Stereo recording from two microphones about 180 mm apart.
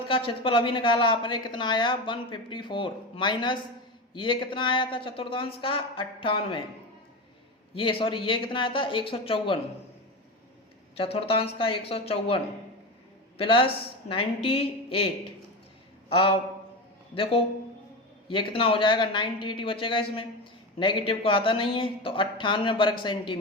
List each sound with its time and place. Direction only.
0.3 s speech: 30° left (ahead or behind)
7.8 s speech: 30° left (ahead or behind)
10.9 s speech: 30° left (ahead or behind)
13.4 s a man's voice: 30° left (ahead or behind)
18.3 s speech: 30° left (ahead or behind)